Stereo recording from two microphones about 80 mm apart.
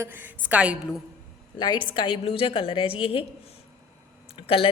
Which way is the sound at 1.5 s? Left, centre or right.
Left.